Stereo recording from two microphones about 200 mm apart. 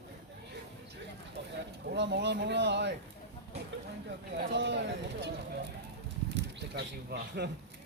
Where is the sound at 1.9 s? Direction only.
60° right (ahead or behind).